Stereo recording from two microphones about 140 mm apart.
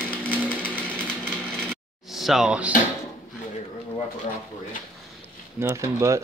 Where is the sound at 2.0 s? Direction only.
Centre (ahead or behind).